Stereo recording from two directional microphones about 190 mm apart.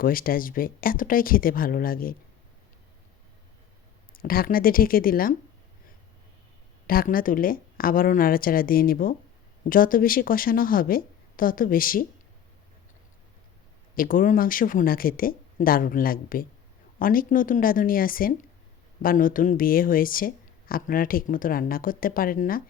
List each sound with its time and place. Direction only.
0.0 s speech: 50° left (ahead or behind)
4.1 s speech: 50° left (ahead or behind)
6.8 s speech: 50° left (ahead or behind)
13.9 s speech: 45° left (ahead or behind)